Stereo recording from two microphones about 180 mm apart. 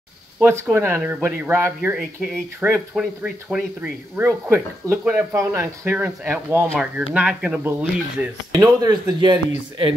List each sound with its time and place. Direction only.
0.4 s speech: 15° right (ahead or behind)